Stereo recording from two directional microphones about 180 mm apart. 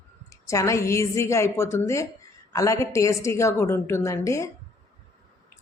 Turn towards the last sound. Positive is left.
turn(degrees=15)  # may be behind; listen again after turning